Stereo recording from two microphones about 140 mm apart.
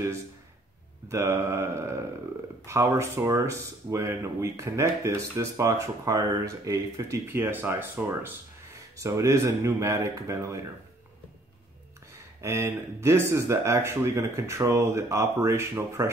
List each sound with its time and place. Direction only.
1.0 s speech: 20° right (ahead or behind)
12.4 s speech: 20° right (ahead or behind)